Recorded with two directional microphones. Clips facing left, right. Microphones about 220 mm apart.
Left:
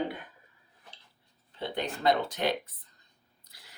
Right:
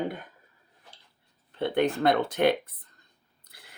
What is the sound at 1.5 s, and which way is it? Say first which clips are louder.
Speech: right 9 dB; 55° right (ahead or behind).